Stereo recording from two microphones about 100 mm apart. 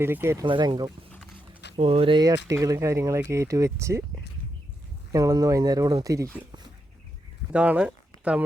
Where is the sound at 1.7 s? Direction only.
80° right.